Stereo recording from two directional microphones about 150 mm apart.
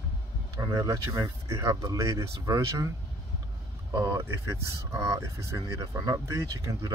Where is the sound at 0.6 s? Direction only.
20° right (ahead or behind).